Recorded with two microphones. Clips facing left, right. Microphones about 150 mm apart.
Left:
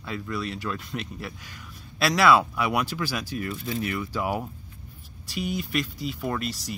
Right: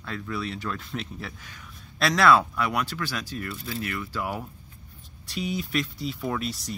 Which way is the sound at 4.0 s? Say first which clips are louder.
Left 3 dB; 15° left (ahead or behind).